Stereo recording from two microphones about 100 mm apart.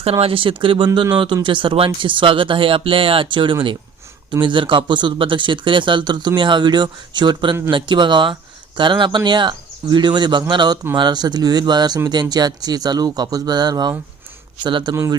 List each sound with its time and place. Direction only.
0.0 s speech: 75° right (ahead or behind); by 14.9 s 50° right (ahead or behind)